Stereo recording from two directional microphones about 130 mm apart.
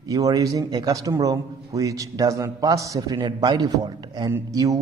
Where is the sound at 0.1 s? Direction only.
25° right (ahead or behind).